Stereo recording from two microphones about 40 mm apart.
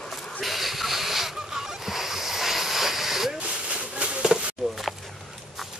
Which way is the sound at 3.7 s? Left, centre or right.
Right.